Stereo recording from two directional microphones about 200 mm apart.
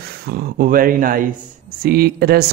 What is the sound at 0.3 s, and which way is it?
A man's voice, 45° right (ahead or behind).